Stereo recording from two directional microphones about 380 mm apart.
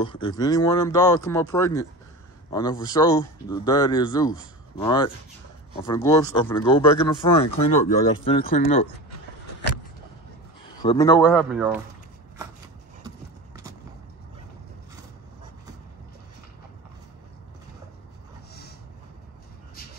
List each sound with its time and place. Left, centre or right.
0.0 s speech: centre
10.8 s speech: centre